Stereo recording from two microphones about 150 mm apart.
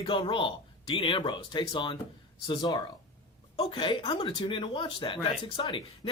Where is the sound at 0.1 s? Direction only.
35° left (ahead or behind).